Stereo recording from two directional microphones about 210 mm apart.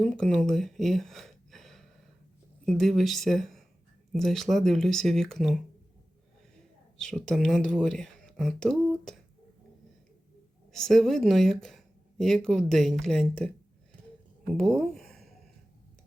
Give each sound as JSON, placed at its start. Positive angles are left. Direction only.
{"t": 0.0, "sound": "speech", "side_deg": 5}
{"t": 7.0, "sound": "speech", "side_deg": 5}
{"t": 10.7, "sound": "speech", "side_deg": 0}
{"t": 14.5, "sound": "speech", "side_deg": 5}